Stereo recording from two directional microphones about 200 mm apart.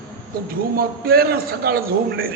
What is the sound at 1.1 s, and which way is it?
Speech, 50° right (ahead or behind).